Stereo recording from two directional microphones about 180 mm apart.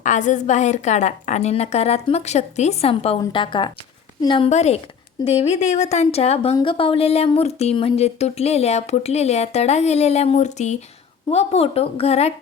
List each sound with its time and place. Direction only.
0.0 s a woman's voice: 45° left (ahead or behind); by 4.4 s 25° left (ahead or behind)
4.4 s a woman's voice: 40° left (ahead or behind)